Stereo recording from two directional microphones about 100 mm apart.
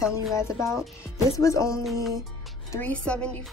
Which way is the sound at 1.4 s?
30° left (ahead or behind).